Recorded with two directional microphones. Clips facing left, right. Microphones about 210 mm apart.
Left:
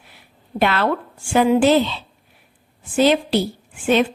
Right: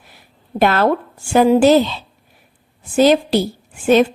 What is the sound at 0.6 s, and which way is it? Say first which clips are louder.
A woman's voice: right 4 dB; 40° right (ahead or behind).